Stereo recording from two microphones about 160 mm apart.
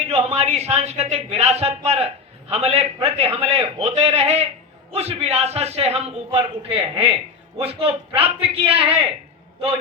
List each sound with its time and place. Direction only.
0.1 s a man's voice: 40° right (ahead or behind)